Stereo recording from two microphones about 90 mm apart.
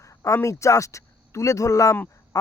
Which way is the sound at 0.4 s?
35° left (ahead or behind).